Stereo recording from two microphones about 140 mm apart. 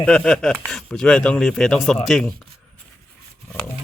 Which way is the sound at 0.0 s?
5° left (ahead or behind).